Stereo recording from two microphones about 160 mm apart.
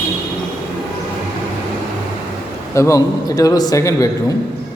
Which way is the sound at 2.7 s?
20° left (ahead or behind).